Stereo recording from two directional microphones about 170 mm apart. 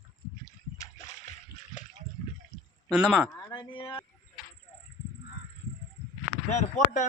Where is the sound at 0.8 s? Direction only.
45° left (ahead or behind).